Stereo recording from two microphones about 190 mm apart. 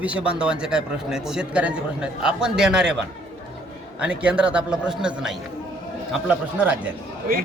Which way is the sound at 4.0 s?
5° right (ahead or behind).